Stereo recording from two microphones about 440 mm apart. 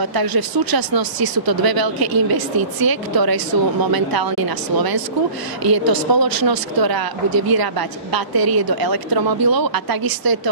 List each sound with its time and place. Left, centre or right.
0.0 s speech: right